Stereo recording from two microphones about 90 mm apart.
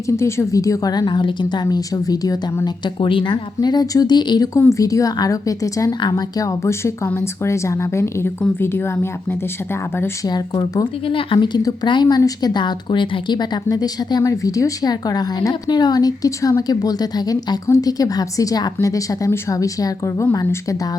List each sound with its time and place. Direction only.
0.1 s speech: 30° left (ahead or behind); by 1.6 s 55° left (ahead or behind)
1.6 s speech: 40° left (ahead or behind)
2.6 s speech: 60° left (ahead or behind)
4.7 s a woman's voice: 40° left (ahead or behind)
10.2 s speech: 50° left (ahead or behind)
11.0 s a woman's voice: 75° left (ahead or behind); by 20.2 s 35° left (ahead or behind)